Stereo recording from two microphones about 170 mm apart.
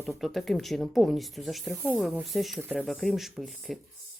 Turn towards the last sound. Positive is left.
turn(degrees=0)  # may be behind; listen again after turning